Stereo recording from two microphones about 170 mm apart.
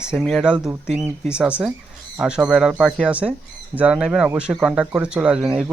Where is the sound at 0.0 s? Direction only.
5° right (ahead or behind).